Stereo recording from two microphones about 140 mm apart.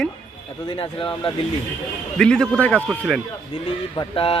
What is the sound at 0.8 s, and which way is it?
Speech, 35° left (ahead or behind).